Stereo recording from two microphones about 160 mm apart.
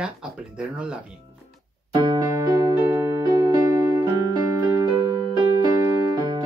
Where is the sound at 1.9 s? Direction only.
25° right (ahead or behind).